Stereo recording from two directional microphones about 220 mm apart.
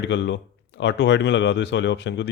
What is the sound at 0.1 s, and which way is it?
Speech, 55° left (ahead or behind).